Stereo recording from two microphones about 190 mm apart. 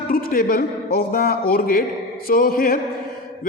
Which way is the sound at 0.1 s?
50° left (ahead or behind).